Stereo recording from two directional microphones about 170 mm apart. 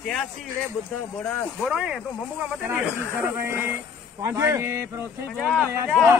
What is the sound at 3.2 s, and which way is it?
A man's voice, 15° right (ahead or behind).